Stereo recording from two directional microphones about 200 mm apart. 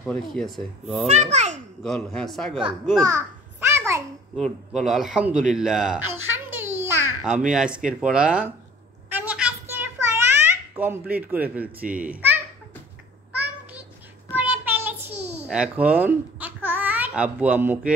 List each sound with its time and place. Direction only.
0.0 s a child's voice: centre (ahead or behind)
1.0 s a child's voice: 35° right (ahead or behind)
1.8 s a child's voice: centre (ahead or behind)
3.6 s a sound: 15° right (ahead or behind)
4.4 s a man's voice: centre (ahead or behind)
9.1 s a sound: 5° right (ahead or behind)
14.3 s child singing: 10° right (ahead or behind)
15.5 s speech: 5° right (ahead or behind)